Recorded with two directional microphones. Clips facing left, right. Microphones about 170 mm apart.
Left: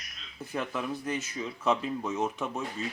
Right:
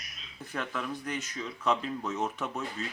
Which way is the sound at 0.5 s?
10° left (ahead or behind).